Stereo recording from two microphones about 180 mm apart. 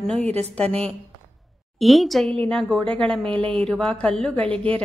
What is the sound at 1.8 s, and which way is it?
A woman's voice, centre (ahead or behind).